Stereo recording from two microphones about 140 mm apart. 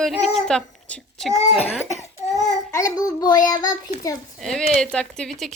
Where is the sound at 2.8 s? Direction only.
25° left (ahead or behind).